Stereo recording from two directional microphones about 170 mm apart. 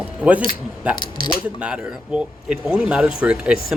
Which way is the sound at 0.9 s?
25° left (ahead or behind).